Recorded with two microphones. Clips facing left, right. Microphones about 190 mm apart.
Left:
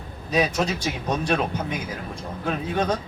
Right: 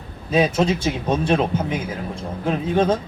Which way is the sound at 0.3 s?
25° right (ahead or behind).